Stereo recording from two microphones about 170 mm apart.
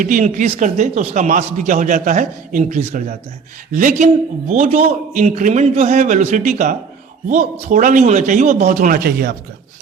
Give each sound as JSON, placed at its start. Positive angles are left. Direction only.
{"t": 0.0, "sound": "a man's voice", "side_deg": -50}